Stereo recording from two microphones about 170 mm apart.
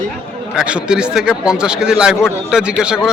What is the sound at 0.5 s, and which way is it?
Speech, 5° right (ahead or behind).